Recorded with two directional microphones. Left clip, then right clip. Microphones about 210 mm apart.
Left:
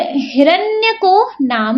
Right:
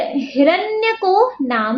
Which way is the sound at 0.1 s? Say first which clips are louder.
Left 3 dB; 40° left (ahead or behind).